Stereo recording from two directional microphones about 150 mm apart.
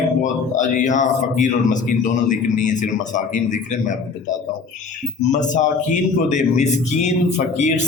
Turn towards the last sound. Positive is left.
turn(degrees=50)  # may be behind; listen again after turning